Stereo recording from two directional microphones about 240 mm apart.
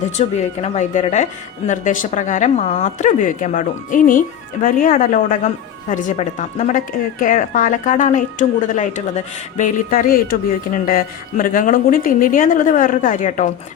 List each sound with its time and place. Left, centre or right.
0.2 s a woman's voice: left